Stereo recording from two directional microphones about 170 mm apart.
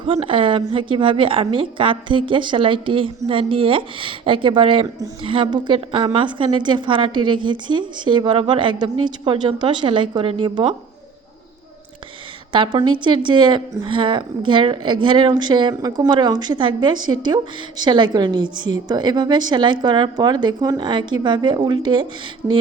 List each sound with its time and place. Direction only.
0.0 s a woman's voice: 30° right (ahead or behind)
12.5 s a woman's voice: 30° right (ahead or behind)
22.4 s a sound: 10° right (ahead or behind)